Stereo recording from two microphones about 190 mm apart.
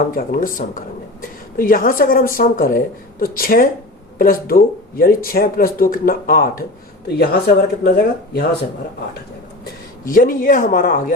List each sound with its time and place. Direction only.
0.0 s speech: 50° left (ahead or behind)
10.1 s speech: 45° left (ahead or behind)